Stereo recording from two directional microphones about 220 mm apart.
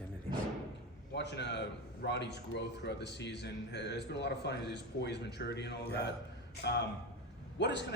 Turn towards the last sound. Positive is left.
turn(degrees=50)  # may be behind; listen again after turning